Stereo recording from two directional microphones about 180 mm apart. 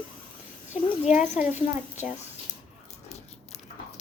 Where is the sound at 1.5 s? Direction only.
40° left (ahead or behind).